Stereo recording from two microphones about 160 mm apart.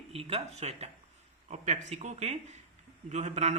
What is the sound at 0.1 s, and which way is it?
Speech, 40° right (ahead or behind).